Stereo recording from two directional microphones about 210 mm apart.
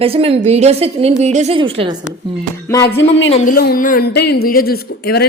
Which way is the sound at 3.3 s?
40° left (ahead or behind).